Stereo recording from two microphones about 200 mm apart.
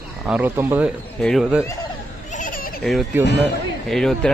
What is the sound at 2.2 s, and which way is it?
Goat, 40° left (ahead or behind).